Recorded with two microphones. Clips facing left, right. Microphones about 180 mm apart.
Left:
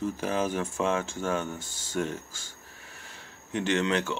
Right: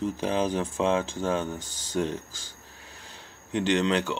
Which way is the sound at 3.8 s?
35° right (ahead or behind).